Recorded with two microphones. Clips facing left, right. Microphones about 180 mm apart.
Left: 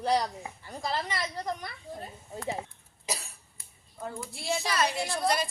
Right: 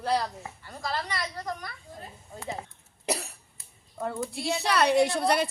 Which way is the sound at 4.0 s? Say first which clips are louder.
Right 7 dB; 65° right (ahead or behind).